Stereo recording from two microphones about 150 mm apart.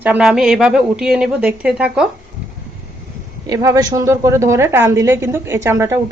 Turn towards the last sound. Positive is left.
turn(degrees=-15)  # may be behind; listen again after turning